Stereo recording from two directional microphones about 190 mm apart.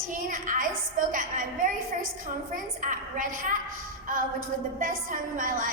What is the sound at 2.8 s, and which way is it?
Speech, 45° right (ahead or behind).